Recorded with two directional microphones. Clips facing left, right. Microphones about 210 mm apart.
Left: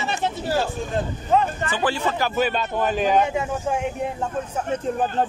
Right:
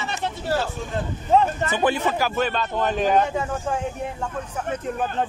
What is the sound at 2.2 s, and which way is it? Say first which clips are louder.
Speech: left 1 dB; 5° right (ahead or behind).